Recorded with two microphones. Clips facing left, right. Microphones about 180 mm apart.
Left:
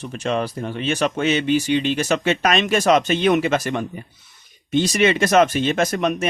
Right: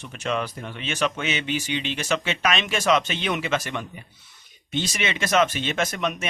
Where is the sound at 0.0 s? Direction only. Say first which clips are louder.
Left 5 dB; 35° left (ahead or behind).